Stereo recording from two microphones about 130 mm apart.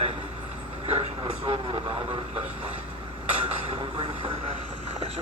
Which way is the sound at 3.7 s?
40° right (ahead or behind).